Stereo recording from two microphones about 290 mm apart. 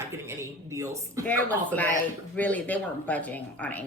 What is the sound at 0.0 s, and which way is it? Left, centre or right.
Speech, centre.